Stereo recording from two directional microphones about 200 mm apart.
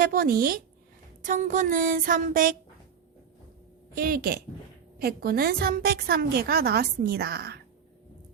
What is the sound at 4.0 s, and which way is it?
A woman's voice, 50° right (ahead or behind).